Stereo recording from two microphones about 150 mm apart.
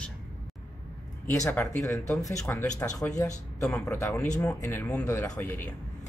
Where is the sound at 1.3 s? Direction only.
20° left (ahead or behind).